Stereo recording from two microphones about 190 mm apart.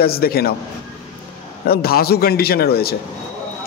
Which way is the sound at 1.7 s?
55° left (ahead or behind).